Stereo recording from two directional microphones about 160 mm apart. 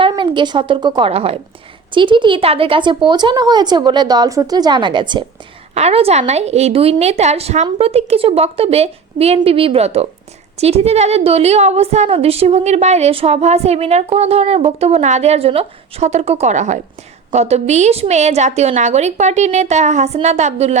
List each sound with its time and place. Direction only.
0.1 s a woman's voice: 30° right (ahead or behind)
5.7 s a woman's voice: 40° right (ahead or behind)